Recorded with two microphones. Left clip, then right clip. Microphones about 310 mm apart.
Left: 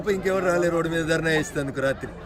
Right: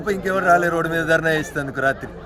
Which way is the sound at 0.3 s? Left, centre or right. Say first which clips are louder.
Right 7 dB; centre.